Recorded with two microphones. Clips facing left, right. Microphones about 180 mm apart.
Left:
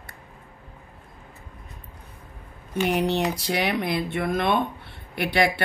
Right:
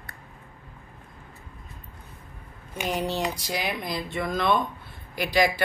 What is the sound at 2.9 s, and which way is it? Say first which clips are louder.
Speech: left 3 dB; 65° left (ahead or behind).